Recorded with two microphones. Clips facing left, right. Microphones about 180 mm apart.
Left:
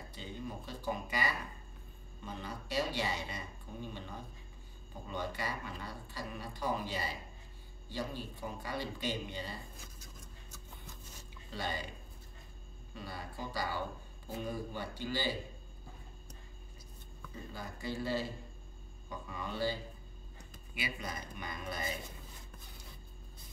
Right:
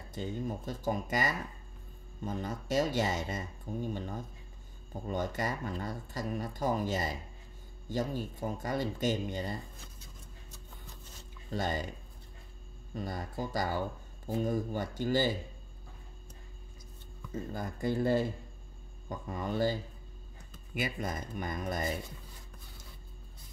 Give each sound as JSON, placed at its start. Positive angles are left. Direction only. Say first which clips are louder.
{"t": 0.1, "sound": "speech", "louder": "right 8 dB", "side_deg": -45}
{"t": 11.5, "sound": "speech", "louder": "right 6 dB", "side_deg": -45}
{"t": 12.9, "sound": "speech", "louder": "right 7 dB", "side_deg": -45}
{"t": 17.3, "sound": "speech", "louder": "right 8 dB", "side_deg": -50}